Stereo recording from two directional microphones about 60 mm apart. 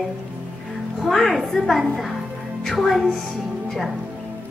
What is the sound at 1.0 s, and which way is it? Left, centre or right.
A woman's voice, centre.